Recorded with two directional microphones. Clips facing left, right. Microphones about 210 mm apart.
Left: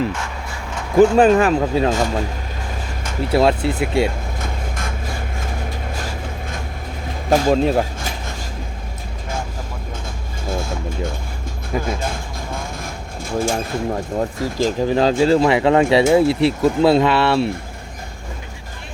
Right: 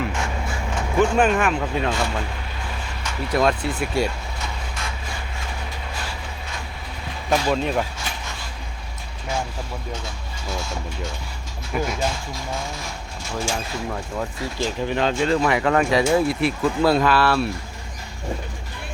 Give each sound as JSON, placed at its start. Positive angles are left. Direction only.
{"t": 0.9, "sound": "speech", "side_deg": 35}
{"t": 3.3, "sound": "speech", "side_deg": 25}
{"t": 4.4, "sound": "vehicle", "side_deg": 50}
{"t": 7.3, "sound": "speech", "side_deg": 45}
{"t": 10.4, "sound": "speech", "side_deg": 50}
{"t": 11.9, "sound": "vehicle", "side_deg": 55}
{"t": 13.9, "sound": "speech", "side_deg": 40}